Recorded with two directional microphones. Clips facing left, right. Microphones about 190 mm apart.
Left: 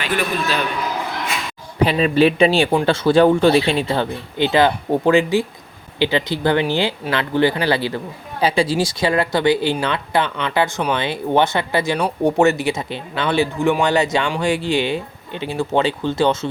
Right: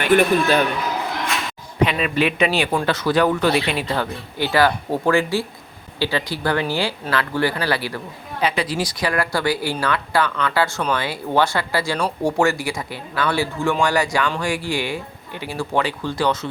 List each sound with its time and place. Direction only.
0.0 s a man's voice: 55° right (ahead or behind)
1.8 s a man's voice: 30° left (ahead or behind)